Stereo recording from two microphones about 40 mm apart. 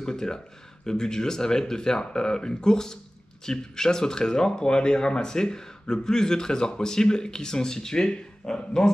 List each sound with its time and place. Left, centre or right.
0.0 s speech: centre